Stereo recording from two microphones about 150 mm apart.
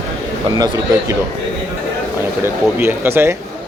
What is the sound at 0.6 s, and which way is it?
Speech, 25° right (ahead or behind).